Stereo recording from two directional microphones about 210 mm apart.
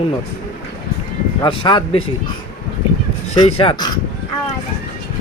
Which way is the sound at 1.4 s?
20° left (ahead or behind).